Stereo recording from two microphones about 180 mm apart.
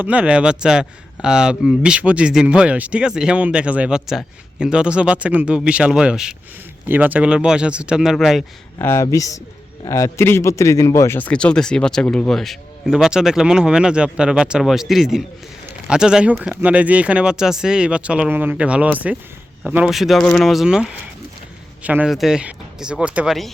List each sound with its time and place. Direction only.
0.0 s speech: 5° right (ahead or behind)
8.8 s speech: 15° left (ahead or behind); by 23.5 s centre (ahead or behind)